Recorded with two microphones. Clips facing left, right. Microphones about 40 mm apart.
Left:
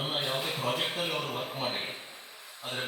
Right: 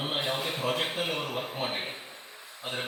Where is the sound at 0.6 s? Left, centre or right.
Right.